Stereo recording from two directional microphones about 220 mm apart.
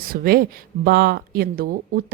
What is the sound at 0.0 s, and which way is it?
A woman's voice, 45° right (ahead or behind).